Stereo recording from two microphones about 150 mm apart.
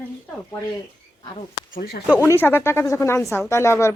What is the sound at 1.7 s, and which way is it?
Speech, 90° left.